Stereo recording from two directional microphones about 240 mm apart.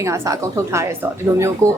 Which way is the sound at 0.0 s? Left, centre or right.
Centre.